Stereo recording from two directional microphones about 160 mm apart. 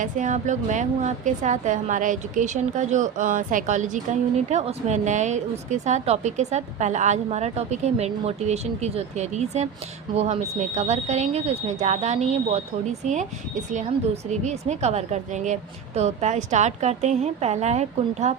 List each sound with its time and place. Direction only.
0.0 s a woman's voice: 50° right (ahead or behind)